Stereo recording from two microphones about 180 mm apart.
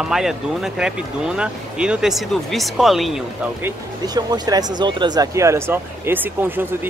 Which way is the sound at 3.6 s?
20° right (ahead or behind).